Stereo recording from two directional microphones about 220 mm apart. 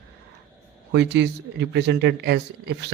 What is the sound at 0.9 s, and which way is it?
Speech, 50° right (ahead or behind).